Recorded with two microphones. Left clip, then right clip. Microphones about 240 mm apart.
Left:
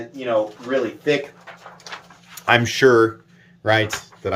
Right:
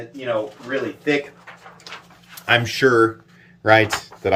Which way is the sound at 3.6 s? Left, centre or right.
Centre.